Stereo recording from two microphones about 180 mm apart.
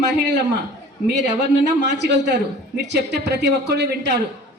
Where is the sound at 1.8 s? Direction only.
75° right (ahead or behind).